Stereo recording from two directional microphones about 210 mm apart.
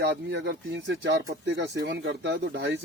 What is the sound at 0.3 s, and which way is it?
Speech, 55° right (ahead or behind).